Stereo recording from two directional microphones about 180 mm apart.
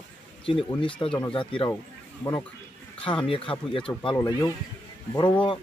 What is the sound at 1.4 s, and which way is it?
Speech, 30° left (ahead or behind).